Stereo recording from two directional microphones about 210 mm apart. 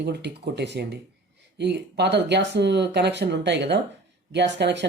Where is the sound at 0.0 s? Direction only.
55° right (ahead or behind).